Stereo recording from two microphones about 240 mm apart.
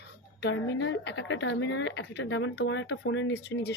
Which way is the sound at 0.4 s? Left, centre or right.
Left.